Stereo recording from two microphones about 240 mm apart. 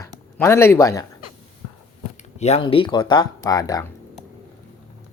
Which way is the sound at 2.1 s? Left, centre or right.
Left.